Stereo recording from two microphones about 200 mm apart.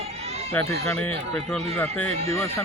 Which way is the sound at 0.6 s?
10° left (ahead or behind).